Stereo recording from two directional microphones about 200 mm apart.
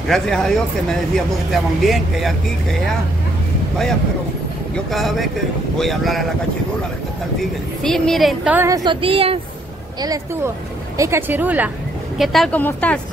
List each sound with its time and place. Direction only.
0.1 s speech: centre (ahead or behind)
4.9 s speech: centre (ahead or behind)
7.8 s speech: centre (ahead or behind)
8.5 s a woman's voice: 15° right (ahead or behind)
10.0 s speech: 15° right (ahead or behind); by 13.0 s 5° left (ahead or behind)